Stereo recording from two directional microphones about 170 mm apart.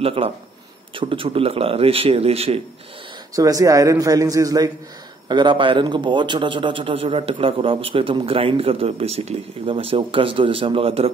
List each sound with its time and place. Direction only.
0.0 s a man's voice: 35° right (ahead or behind)
3.3 s a man's voice: 20° right (ahead or behind)